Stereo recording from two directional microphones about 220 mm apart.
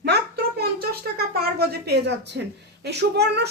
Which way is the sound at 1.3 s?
45° right (ahead or behind).